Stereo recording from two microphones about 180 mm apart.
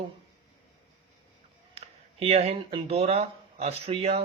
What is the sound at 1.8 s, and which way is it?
Speech, 35° right (ahead or behind).